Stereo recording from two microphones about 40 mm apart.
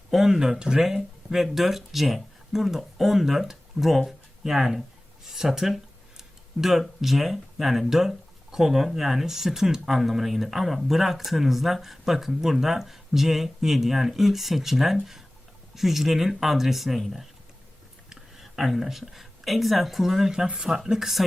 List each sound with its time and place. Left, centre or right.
0.1 s speech: centre
0.9 s speech: centre